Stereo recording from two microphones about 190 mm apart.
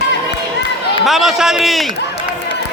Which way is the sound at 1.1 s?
Centre (ahead or behind).